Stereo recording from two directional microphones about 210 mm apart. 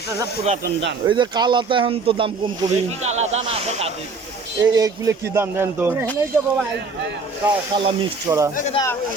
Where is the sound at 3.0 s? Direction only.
30° right (ahead or behind).